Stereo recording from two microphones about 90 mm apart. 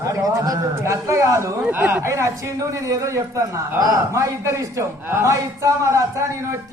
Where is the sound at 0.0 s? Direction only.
40° right (ahead or behind).